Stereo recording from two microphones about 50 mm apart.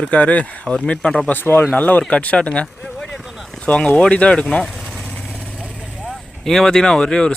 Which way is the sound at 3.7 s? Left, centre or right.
Left.